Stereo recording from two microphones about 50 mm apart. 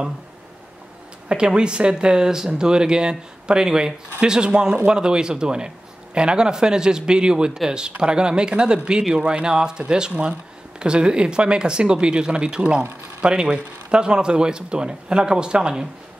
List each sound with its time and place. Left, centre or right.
1.3 s speech: centre